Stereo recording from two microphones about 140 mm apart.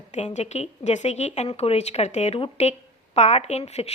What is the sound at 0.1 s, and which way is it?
A woman's voice, 55° left (ahead or behind).